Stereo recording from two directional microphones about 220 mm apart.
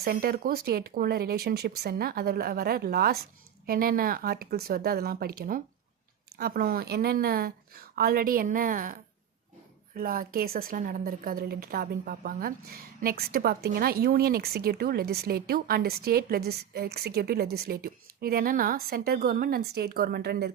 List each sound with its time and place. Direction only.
0.0 s a woman's voice: 45° right (ahead or behind)